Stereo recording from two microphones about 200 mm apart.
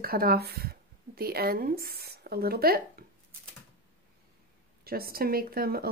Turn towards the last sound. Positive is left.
turn(degrees=-50)  # may be behind; listen again after turning